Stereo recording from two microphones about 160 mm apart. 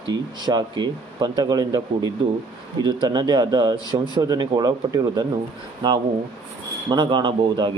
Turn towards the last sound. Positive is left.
turn(degrees=-30)  # may be behind; listen again after turning